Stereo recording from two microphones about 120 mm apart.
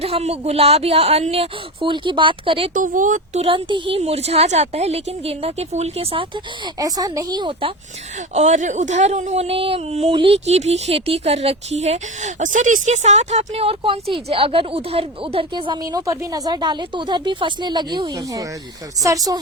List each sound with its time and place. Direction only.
0.0 s speech: 60° right (ahead or behind)
2.7 s speech: 90° right
3.4 s speech: 45° right (ahead or behind)
6.7 s a woman's voice: 30° right (ahead or behind)
8.3 s speech: 75° right (ahead or behind); by 19.4 s 30° right (ahead or behind)